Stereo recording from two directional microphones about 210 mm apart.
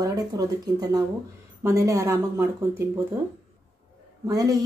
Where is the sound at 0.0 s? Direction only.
15° right (ahead or behind).